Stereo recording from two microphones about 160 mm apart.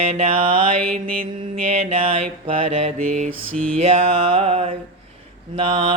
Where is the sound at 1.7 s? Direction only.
40° right (ahead or behind).